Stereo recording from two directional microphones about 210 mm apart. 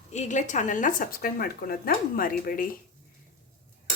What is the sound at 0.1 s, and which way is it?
Speech, 35° left (ahead or behind).